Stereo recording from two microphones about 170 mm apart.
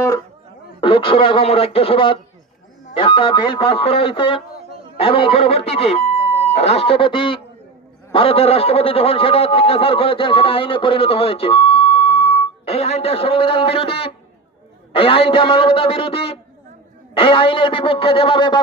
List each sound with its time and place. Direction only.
0.7 s a man's voice: 30° left (ahead or behind)